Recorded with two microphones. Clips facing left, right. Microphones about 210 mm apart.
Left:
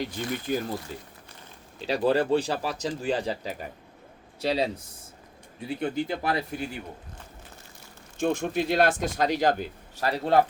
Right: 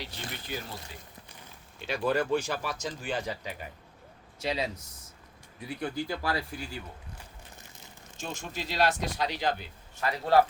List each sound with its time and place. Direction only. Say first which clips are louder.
0.0 s speech: left 10 dB; 50° left (ahead or behind)
1.8 s speech: left 5 dB; 35° left (ahead or behind)
8.2 s speech: left 12 dB; 55° left (ahead or behind); by 10.2 s 40° left (ahead or behind)